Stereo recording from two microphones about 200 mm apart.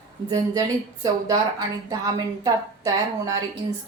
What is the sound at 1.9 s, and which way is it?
Speech, 15° right (ahead or behind).